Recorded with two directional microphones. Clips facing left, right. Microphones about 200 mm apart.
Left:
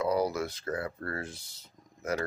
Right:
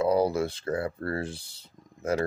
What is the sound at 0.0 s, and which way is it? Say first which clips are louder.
Speech: right 5 dB; 30° right (ahead or behind).